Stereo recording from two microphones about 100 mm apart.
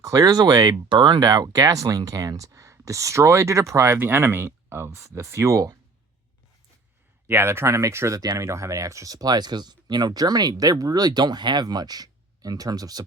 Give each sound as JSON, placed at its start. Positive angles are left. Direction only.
{"t": 0.0, "sound": "speech", "side_deg": -40}
{"t": 7.3, "sound": "speech", "side_deg": -20}